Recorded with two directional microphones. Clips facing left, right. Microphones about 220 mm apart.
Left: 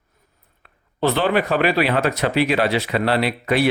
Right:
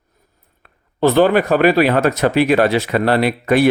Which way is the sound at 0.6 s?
45° right (ahead or behind).